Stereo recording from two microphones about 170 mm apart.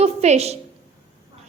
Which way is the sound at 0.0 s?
40° right (ahead or behind).